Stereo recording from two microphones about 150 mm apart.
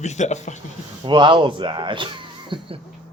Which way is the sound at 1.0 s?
30° right (ahead or behind).